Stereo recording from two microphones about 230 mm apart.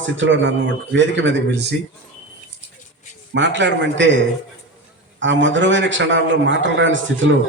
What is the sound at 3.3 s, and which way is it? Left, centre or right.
A man's voice, right.